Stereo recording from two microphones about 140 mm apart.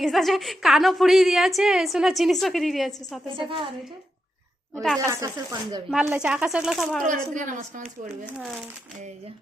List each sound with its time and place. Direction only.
0.0 s a woman's voice: centre (ahead or behind)
3.2 s a woman's voice: 35° right (ahead or behind)
4.9 s speech: 20° right (ahead or behind)
6.1 s a woman's voice: 5° right (ahead or behind)
7.0 s a woman's voice: 65° right (ahead or behind)